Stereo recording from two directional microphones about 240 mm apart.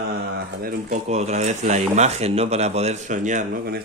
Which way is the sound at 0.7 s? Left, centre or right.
Right.